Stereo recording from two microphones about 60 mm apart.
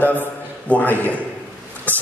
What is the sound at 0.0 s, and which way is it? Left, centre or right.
A man's voice, left.